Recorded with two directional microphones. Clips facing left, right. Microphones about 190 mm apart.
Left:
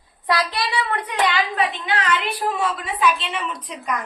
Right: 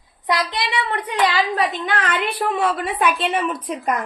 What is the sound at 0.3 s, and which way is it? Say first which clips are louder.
A woman's voice: even; 20° right (ahead or behind).